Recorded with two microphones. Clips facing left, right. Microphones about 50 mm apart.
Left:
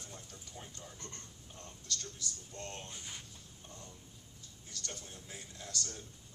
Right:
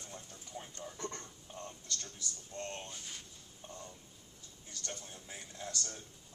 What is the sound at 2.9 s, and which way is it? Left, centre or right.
Speech, centre.